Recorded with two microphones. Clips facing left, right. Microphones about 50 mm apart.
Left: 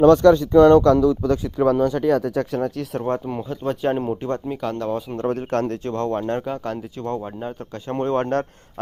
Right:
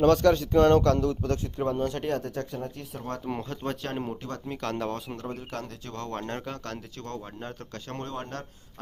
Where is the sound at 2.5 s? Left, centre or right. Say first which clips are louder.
Left 12 dB; left.